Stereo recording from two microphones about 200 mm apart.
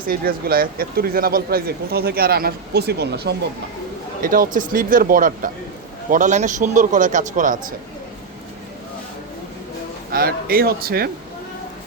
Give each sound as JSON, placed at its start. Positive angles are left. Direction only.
{"t": 0.1, "sound": "speech", "side_deg": -50}
{"t": 4.2, "sound": "a man's voice", "side_deg": -45}
{"t": 10.1, "sound": "speech", "side_deg": -45}